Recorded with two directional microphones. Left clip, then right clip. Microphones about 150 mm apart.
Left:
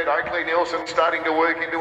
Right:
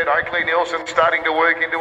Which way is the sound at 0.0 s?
30° right (ahead or behind).